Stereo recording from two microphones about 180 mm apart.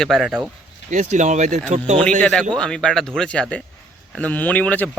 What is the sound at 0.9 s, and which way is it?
Speech, 45° right (ahead or behind).